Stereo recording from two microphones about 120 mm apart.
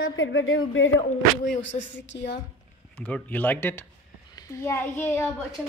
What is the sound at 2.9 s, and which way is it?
A child's voice, 15° left (ahead or behind).